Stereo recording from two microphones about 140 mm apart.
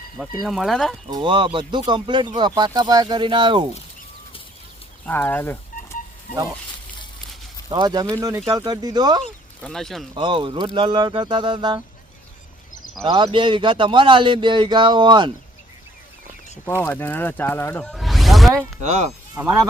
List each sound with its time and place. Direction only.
0.4 s speech: centre (ahead or behind)
1.1 s speech: 35° right (ahead or behind)
5.0 s speech: 15° left (ahead or behind)
7.7 s speech: 30° right (ahead or behind)
9.6 s speech: 5° left (ahead or behind)
10.2 s speech: 35° right (ahead or behind)
13.1 s speech: 35° right (ahead or behind)
16.8 s speech: 15° left (ahead or behind)
17.8 s a sound: centre (ahead or behind)
18.8 s speech: 55° right (ahead or behind)
19.4 s speech: 15° right (ahead or behind)